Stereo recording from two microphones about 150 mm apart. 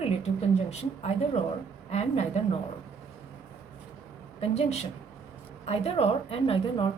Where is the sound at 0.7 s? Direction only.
45° left (ahead or behind).